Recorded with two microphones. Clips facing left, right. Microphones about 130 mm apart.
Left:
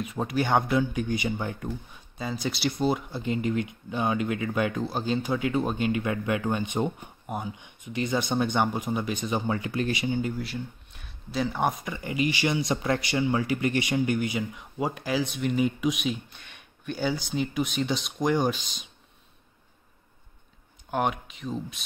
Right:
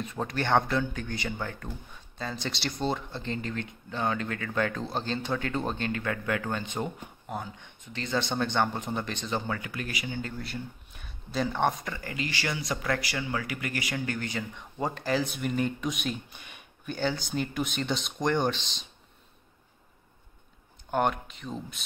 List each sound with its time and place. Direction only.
0.0 s speech: 10° left (ahead or behind)
9.7 s speech: 25° left (ahead or behind)
10.4 s speech: centre (ahead or behind)
20.9 s speech: 5° left (ahead or behind)